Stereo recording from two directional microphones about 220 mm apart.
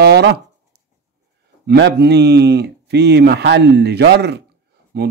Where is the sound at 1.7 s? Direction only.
50° right (ahead or behind).